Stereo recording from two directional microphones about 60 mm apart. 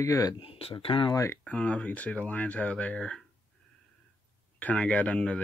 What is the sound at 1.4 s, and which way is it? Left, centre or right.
Speech, left.